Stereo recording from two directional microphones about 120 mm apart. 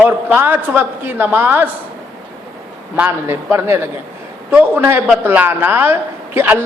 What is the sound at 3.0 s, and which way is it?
A man's voice, 20° right (ahead or behind).